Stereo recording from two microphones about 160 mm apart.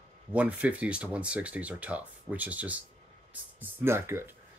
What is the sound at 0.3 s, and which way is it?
Speech, 10° right (ahead or behind).